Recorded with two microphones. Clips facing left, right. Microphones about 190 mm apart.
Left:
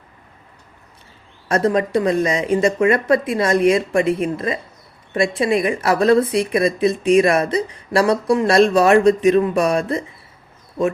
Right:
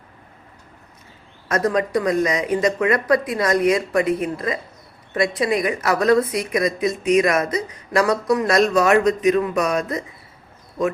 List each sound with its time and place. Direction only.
1.5 s a woman's voice: 30° left (ahead or behind)